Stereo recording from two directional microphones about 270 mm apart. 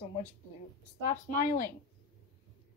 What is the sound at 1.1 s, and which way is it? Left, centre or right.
Speech, left.